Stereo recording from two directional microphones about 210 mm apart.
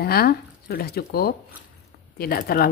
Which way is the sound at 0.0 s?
45° left (ahead or behind).